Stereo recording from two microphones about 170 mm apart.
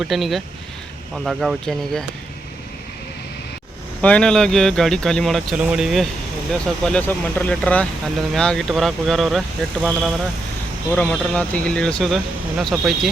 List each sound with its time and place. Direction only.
0.0 s speech: centre (ahead or behind)
4.0 s speech: 5° left (ahead or behind)